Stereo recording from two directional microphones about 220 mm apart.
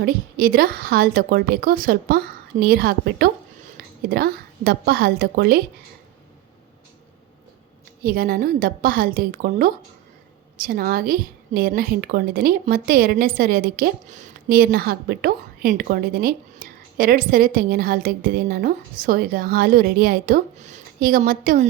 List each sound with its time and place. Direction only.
0.0 s a woman's voice: 40° right (ahead or behind)
3.8 s a sound: 40° right (ahead or behind)
4.1 s a woman's voice: 45° right (ahead or behind)
8.0 s a woman's voice: 40° right (ahead or behind)